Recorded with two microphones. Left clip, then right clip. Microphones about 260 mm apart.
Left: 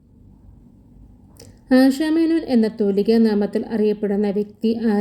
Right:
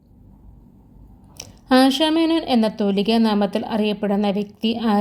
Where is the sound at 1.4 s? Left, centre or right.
Right.